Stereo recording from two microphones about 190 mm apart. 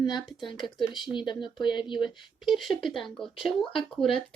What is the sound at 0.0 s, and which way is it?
Speech, 25° left (ahead or behind).